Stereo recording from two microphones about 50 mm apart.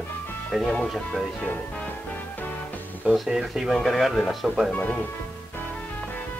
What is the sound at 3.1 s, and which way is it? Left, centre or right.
Speech, centre.